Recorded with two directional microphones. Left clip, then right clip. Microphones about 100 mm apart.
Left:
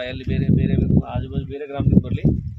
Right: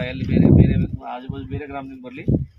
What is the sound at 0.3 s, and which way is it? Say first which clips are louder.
Speech: right 7 dB; 25° left (ahead or behind).